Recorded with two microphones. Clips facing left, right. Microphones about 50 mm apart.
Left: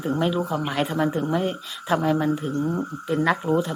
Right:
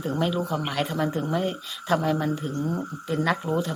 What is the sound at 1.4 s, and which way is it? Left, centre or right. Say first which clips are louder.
Speech: left 2 dB; left.